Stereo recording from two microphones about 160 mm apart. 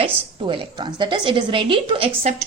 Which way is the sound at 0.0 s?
30° right (ahead or behind).